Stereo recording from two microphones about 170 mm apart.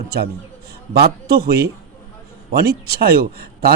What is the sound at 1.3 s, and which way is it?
Speech, 65° right (ahead or behind).